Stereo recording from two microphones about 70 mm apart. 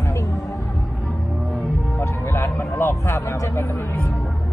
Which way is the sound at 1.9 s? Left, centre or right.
Left.